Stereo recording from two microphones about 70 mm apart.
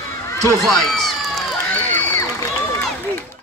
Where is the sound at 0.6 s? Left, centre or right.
Centre.